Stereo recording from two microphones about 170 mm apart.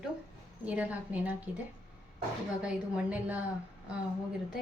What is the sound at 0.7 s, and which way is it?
Speech, 10° right (ahead or behind).